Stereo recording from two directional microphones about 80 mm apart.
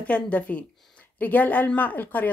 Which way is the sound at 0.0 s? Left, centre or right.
Centre.